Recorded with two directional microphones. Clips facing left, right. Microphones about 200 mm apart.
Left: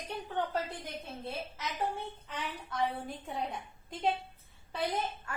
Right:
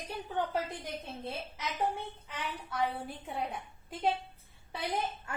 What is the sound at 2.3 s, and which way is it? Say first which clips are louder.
A woman's voice: even; 10° right (ahead or behind).